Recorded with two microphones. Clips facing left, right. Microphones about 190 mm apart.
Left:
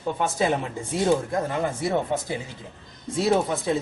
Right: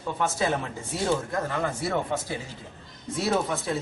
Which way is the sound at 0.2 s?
20° left (ahead or behind).